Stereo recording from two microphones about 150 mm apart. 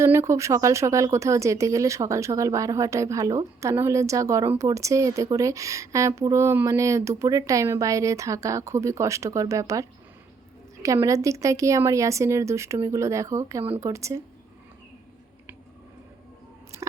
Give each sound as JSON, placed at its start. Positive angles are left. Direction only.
{"t": 0.0, "sound": "speech", "side_deg": -20}
{"t": 10.8, "sound": "speech", "side_deg": -20}